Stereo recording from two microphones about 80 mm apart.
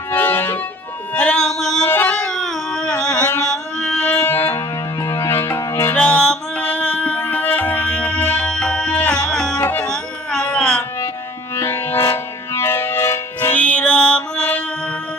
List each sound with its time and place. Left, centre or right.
0.1 s music: left
1.1 s music: centre
1.9 s a sound: left
2.1 s a sound: centre
4.1 s music: left
5.0 s music: left
6.0 s music: centre
11.5 s music: left
13.5 s music: centre